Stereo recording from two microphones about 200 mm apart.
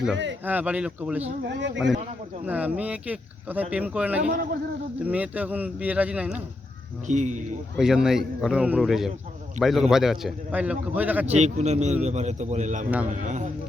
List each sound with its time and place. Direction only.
0.4 s speech: 10° right (ahead or behind)
1.5 s speech: 60° right (ahead or behind)
2.5 s speech: 5° right (ahead or behind)
4.2 s a man's voice: 45° right (ahead or behind)
5.0 s speech: 5° right (ahead or behind)
7.1 s speech: 35° right (ahead or behind)
7.8 s a man's voice: centre (ahead or behind)
11.3 s speech: 35° right (ahead or behind)